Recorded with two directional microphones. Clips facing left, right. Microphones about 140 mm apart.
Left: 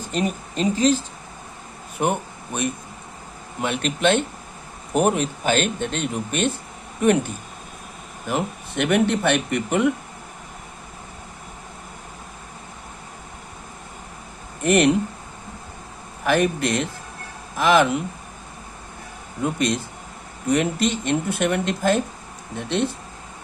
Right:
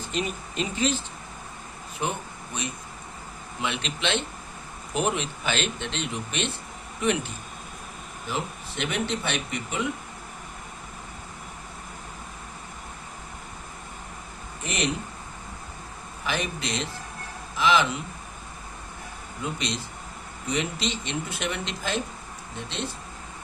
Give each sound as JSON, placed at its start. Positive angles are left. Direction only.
{"t": 0.1, "sound": "speech", "side_deg": 40}
{"t": 2.0, "sound": "speech", "side_deg": 55}
{"t": 8.3, "sound": "speech", "side_deg": 55}
{"t": 14.6, "sound": "speech", "side_deg": 55}
{"t": 16.2, "sound": "speech", "side_deg": 55}
{"t": 19.4, "sound": "speech", "side_deg": 50}